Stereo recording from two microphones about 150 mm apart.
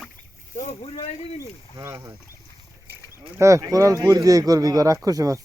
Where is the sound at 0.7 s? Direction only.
40° left (ahead or behind).